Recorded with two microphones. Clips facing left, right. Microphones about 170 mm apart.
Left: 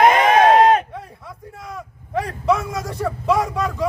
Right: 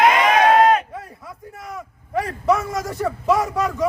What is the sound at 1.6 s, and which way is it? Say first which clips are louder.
A man's voice: even; centre (ahead or behind).